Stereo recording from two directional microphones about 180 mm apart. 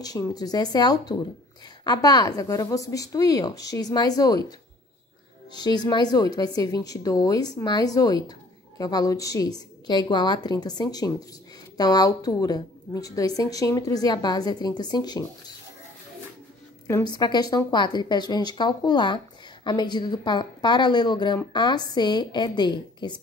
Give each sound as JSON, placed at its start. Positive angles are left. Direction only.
{"t": 0.0, "sound": "a woman's voice", "side_deg": 20}
{"t": 16.8, "sound": "a woman's voice", "side_deg": 20}